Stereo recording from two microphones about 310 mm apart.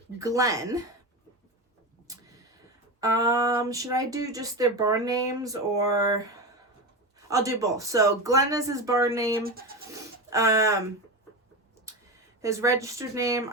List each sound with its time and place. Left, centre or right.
0.2 s speech: centre
2.1 s a sound: centre
3.0 s speech: centre
9.4 s speech: right
9.9 s a sound: centre
12.4 s speech: centre